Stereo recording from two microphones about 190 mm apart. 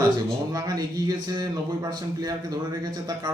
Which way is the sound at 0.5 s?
20° right (ahead or behind).